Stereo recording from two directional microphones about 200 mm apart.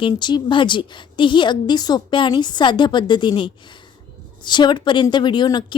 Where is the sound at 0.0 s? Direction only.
20° left (ahead or behind).